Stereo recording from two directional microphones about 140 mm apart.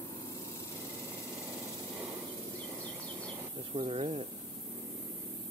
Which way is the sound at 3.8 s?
45° right (ahead or behind).